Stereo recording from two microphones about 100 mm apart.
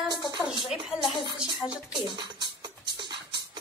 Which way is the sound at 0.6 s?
5° right (ahead or behind).